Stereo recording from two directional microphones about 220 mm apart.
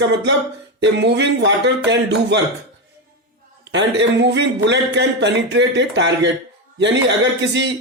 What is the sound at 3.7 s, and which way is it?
A man's voice, 55° right (ahead or behind).